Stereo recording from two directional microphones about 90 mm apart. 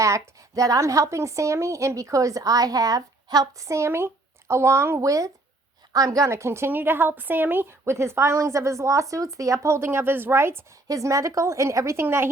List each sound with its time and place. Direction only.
0.0 s a woman's voice: 40° right (ahead or behind)
10.8 s a woman's voice: 40° right (ahead or behind)